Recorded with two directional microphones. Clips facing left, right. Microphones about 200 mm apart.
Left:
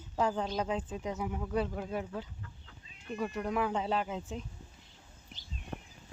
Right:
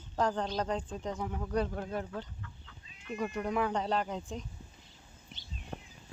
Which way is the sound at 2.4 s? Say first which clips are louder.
Right 1 dB; 35° left (ahead or behind).